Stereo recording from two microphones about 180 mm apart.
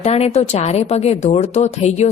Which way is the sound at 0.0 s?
35° left (ahead or behind).